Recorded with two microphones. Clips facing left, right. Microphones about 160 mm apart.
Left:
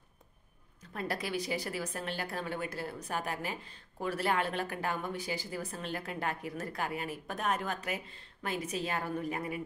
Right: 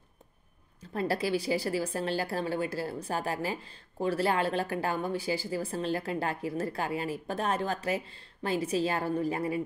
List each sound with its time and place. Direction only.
0.7 s a woman's voice: 30° right (ahead or behind)